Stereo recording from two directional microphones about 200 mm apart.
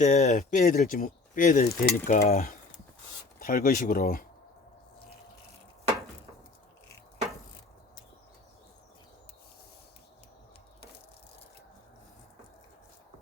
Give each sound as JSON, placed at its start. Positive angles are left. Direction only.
{"t": 0.0, "sound": "speech", "side_deg": 35}